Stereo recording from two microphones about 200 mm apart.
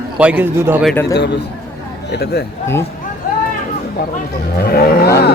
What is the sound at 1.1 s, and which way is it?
Speech, 60° left (ahead or behind).